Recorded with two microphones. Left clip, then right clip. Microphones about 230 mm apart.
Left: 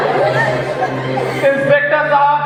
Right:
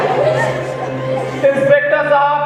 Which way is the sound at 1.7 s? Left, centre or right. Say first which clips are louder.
Even; right.